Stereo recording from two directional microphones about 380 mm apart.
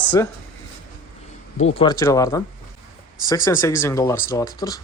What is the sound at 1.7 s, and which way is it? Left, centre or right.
Speech, centre.